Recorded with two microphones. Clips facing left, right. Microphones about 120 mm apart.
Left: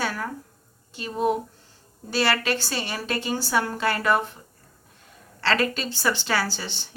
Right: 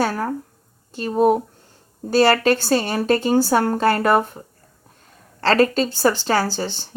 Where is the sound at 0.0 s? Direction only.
40° right (ahead or behind).